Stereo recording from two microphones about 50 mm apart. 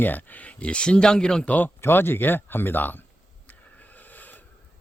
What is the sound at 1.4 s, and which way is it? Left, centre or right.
Speech, left.